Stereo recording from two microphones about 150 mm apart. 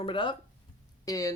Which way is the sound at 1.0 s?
25° left (ahead or behind).